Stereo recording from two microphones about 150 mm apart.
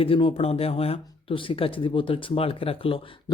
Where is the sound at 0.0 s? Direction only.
35° left (ahead or behind).